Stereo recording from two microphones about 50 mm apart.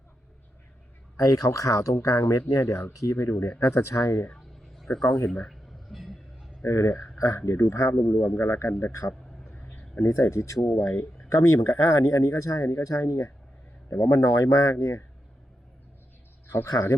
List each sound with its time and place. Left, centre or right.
1.1 s speech: left
2.9 s speech: left
3.6 s speech: left
4.4 s a sound: centre
5.0 s speech: left
5.5 s a sound: centre
6.7 s speech: left
7.7 s speech: left
7.9 s a man's voice: left
8.8 s speech: left
10.2 s speech: left